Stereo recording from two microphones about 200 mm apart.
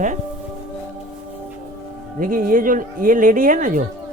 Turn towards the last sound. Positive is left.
turn(degrees=-40)  # may be behind; listen again after turning